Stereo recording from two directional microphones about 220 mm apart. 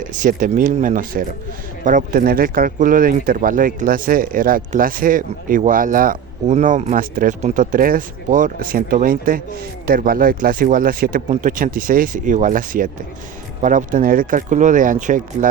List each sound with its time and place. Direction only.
0.0 s speech: 35° right (ahead or behind)